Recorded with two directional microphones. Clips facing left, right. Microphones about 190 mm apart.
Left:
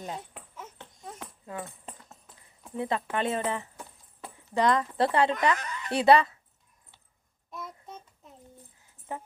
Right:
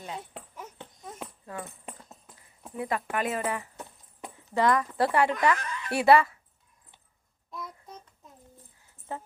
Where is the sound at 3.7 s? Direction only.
15° right (ahead or behind).